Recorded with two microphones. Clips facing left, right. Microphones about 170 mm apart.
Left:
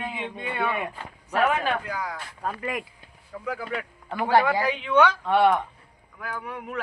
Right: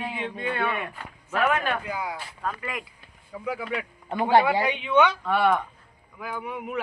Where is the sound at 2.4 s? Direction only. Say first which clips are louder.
Left 2 dB; 35° left (ahead or behind).